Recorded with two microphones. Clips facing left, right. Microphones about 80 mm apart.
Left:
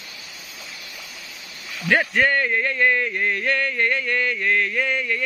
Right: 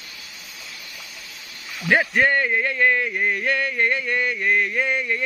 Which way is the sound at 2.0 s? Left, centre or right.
Centre.